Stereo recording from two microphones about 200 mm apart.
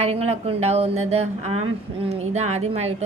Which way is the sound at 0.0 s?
30° right (ahead or behind).